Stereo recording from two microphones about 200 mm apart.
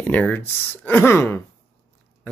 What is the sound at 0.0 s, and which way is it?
Speech, 10° left (ahead or behind).